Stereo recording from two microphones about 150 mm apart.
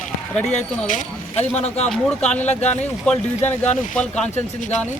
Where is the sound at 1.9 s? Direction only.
5° left (ahead or behind).